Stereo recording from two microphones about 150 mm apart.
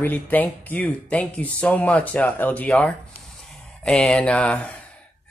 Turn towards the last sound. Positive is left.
turn(degrees=5)  # may be behind; listen again after turning